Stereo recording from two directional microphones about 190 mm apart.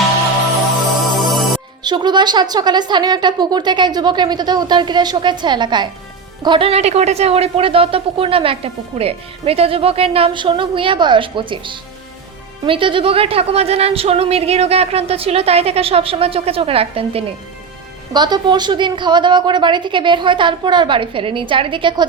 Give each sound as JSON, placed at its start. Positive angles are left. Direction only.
{"t": 1.1, "sound": "music", "side_deg": 0}
{"t": 1.8, "sound": "a woman's voice", "side_deg": -25}